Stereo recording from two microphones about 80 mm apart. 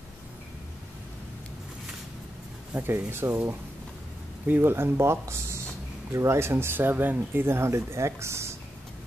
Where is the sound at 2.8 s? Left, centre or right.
Right.